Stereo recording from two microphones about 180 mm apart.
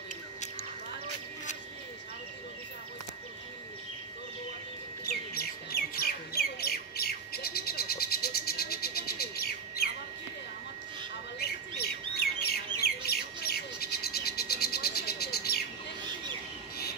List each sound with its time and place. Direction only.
5.0 s squawk: 60° left (ahead or behind)
11.3 s bird: 60° left (ahead or behind)